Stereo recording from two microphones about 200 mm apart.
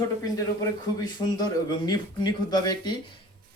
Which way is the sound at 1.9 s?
20° left (ahead or behind).